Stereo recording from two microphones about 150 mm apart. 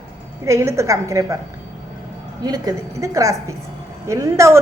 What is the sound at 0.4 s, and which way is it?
Speech, 20° right (ahead or behind).